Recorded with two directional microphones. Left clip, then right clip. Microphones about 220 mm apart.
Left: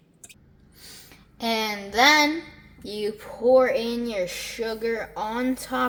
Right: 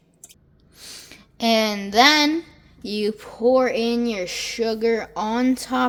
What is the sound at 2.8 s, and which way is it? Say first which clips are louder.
Speech: right 4 dB; 50° right (ahead or behind).